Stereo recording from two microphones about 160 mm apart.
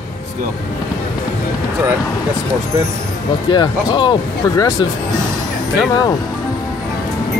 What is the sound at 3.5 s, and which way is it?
Speech, 30° left (ahead or behind).